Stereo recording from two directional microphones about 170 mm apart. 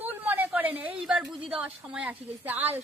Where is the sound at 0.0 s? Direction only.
10° right (ahead or behind).